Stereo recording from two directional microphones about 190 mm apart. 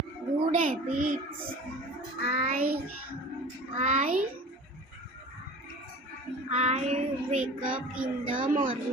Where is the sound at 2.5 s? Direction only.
50° right (ahead or behind).